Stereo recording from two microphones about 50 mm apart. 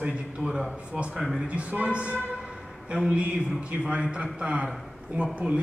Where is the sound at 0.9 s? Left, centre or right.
Right.